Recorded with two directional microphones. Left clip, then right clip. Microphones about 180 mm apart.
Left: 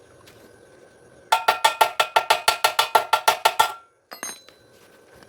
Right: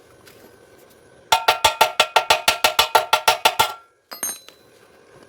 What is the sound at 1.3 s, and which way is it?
Cowbell, 20° right (ahead or behind).